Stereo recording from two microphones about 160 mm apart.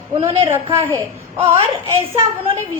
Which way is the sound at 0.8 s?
15° left (ahead or behind).